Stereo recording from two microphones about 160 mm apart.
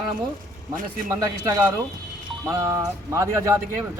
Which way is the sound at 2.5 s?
20° right (ahead or behind).